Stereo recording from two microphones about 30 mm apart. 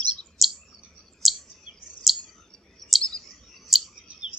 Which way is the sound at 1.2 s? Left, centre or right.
Centre.